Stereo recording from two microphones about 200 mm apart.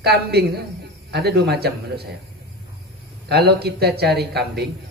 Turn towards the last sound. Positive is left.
turn(degrees=-55)  # may be behind; listen again after turning